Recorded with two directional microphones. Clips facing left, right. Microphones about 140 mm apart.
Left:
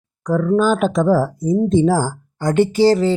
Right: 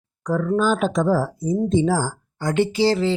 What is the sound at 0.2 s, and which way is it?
Speech, 40° left (ahead or behind).